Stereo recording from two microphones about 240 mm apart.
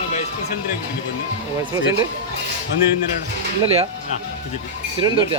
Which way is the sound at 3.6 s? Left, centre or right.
Right.